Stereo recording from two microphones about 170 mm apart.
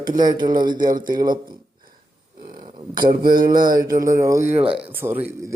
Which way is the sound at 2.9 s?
55° right (ahead or behind).